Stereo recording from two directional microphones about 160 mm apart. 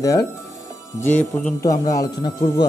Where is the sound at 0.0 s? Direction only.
20° left (ahead or behind).